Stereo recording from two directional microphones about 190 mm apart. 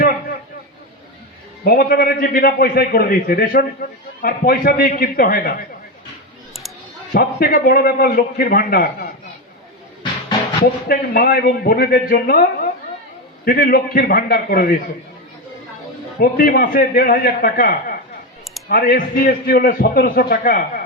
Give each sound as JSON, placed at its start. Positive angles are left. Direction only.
{"t": 1.6, "sound": "a man's voice", "side_deg": 55}
{"t": 7.1, "sound": "a man's voice", "side_deg": 50}
{"t": 10.8, "sound": "a man's voice", "side_deg": 50}
{"t": 16.2, "sound": "a man's voice", "side_deg": 50}